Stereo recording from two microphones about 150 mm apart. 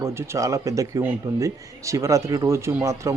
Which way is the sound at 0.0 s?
20° right (ahead or behind).